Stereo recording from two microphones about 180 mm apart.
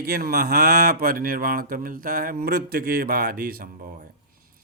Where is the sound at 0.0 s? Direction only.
55° right (ahead or behind).